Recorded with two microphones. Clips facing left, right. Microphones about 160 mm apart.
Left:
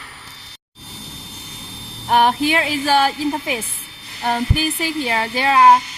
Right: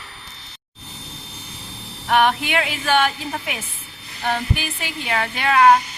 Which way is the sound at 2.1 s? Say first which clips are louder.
Left 2 dB; 35° left (ahead or behind).